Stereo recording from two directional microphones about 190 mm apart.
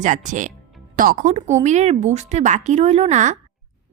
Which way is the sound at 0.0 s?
40° right (ahead or behind).